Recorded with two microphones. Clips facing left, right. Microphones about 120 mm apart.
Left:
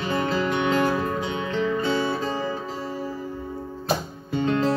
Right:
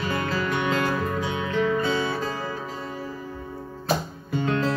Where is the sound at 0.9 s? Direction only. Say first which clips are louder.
Left 1 dB; 50° left (ahead or behind).